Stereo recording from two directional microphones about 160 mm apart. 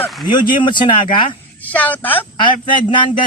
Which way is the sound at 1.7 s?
10° left (ahead or behind).